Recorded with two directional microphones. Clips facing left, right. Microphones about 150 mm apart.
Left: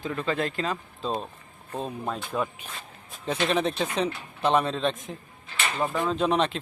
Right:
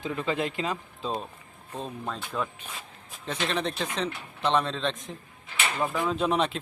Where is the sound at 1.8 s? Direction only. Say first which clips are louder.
Left 3 dB; 10° left (ahead or behind).